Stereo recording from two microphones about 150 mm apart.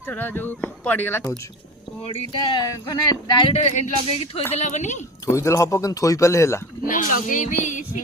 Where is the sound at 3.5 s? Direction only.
50° left (ahead or behind).